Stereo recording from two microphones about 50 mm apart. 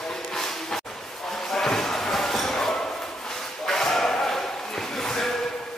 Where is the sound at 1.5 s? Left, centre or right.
Centre.